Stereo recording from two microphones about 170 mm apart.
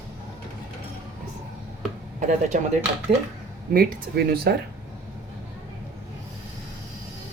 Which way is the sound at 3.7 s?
60° right (ahead or behind).